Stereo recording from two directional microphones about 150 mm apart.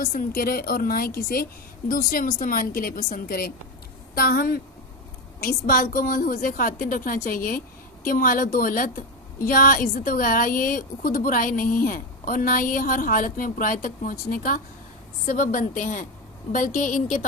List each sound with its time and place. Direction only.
0.0 s a woman's voice: 65° left (ahead or behind)